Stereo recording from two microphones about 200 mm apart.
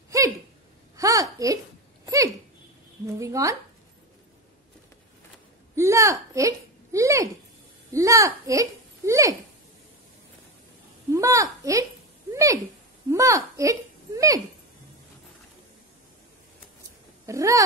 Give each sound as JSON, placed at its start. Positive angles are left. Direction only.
{"t": 0.1, "sound": "a sound", "side_deg": -15}
{"t": 0.9, "sound": "a woman's voice", "side_deg": -15}
{"t": 2.0, "sound": "a sound", "side_deg": -15}
{"t": 3.2, "sound": "speech", "side_deg": -15}
{"t": 5.8, "sound": "a child's voice", "side_deg": -15}
{"t": 11.1, "sound": "speech", "side_deg": -15}
{"t": 13.1, "sound": "speech", "side_deg": -15}
{"t": 17.3, "sound": "speech", "side_deg": -15}